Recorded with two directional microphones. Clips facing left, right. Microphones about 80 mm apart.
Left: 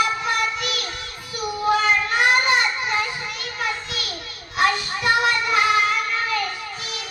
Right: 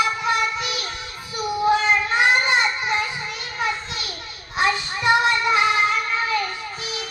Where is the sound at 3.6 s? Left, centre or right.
Right.